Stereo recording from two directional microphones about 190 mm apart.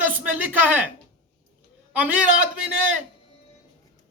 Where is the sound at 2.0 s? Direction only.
10° right (ahead or behind).